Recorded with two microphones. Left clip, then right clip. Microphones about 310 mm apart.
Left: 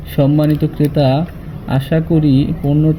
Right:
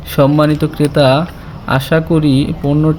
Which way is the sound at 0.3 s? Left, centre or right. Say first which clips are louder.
Right 3 dB; right.